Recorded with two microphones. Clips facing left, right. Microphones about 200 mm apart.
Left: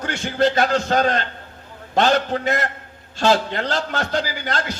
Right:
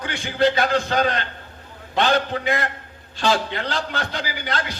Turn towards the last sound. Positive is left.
turn(degrees=45)  # may be behind; listen again after turning